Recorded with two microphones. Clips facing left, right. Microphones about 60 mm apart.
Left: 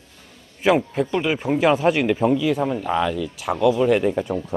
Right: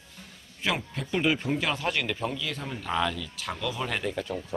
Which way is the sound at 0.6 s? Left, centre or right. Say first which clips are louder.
Left 12 dB; left.